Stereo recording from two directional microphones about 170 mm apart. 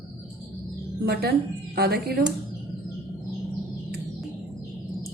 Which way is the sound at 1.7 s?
65° right (ahead or behind).